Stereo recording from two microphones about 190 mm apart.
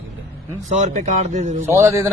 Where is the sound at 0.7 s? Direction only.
40° right (ahead or behind).